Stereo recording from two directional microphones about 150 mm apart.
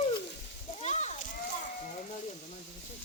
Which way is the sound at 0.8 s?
50° left (ahead or behind).